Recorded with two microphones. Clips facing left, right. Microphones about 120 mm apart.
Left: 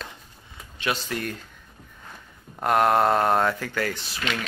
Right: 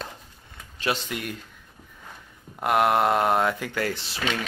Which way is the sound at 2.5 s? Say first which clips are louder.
Left 1 dB; 5° right (ahead or behind).